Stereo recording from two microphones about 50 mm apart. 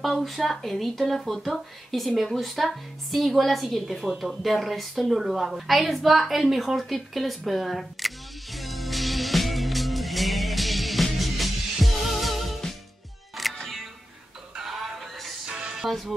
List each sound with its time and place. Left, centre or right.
0.2 s a woman's voice: centre
8.5 s music: centre
15.4 s music: centre
15.7 s music: centre